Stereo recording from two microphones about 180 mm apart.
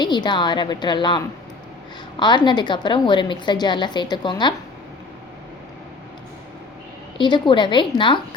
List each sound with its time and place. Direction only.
0.0 s a woman's voice: 25° left (ahead or behind)
7.2 s a woman's voice: 25° left (ahead or behind)